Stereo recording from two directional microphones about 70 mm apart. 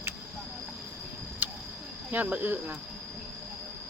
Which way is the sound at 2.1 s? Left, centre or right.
Right.